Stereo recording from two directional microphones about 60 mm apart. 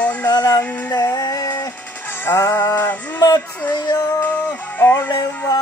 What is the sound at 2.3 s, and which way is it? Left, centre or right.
Music, left.